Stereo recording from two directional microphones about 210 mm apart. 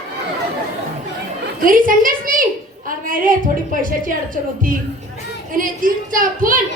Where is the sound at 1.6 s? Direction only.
40° right (ahead or behind).